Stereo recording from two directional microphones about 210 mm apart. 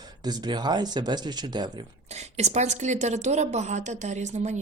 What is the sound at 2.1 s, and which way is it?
Speech, 30° right (ahead or behind).